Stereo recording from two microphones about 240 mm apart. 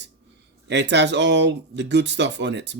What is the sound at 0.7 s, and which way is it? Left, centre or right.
Speech, right.